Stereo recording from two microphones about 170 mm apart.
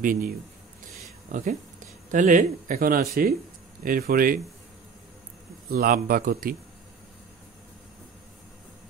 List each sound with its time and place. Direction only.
0.0 s speech: 55° right (ahead or behind)
1.3 s speech: 45° right (ahead or behind)
5.7 s speech: 60° right (ahead or behind)